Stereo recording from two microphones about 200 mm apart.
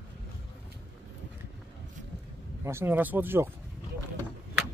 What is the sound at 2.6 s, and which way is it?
Speech, 10° right (ahead or behind).